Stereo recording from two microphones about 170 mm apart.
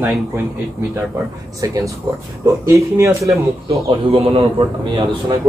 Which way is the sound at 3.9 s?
35° right (ahead or behind).